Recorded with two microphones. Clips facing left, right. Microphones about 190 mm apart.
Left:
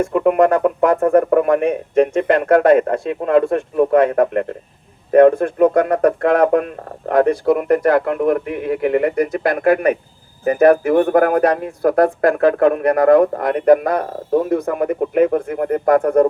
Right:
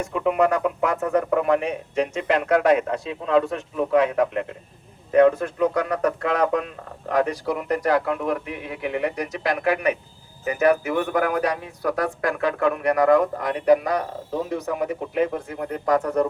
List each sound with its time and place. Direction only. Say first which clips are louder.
0.0 s speech: left 7 dB; 50° left (ahead or behind)